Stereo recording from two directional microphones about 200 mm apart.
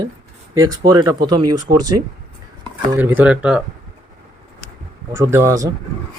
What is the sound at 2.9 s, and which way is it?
Speech, 10° right (ahead or behind).